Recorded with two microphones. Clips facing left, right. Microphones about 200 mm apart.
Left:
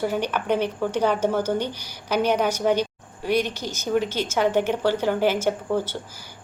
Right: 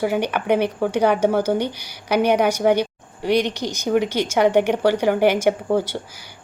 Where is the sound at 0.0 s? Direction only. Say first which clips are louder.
Right 4 dB; 10° right (ahead or behind).